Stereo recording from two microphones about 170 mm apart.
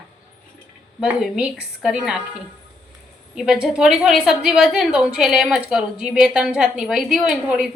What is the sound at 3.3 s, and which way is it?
A woman's voice, 5° right (ahead or behind).